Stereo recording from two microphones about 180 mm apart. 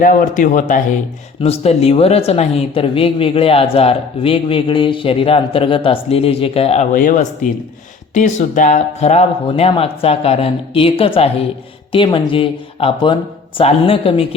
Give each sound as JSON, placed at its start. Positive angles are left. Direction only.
{"t": 0.0, "sound": "speech", "side_deg": 50}
{"t": 1.4, "sound": "speech", "side_deg": 35}